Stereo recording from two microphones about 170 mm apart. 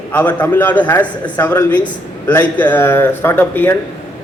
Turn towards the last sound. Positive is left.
turn(degrees=10)  # may be behind; listen again after turning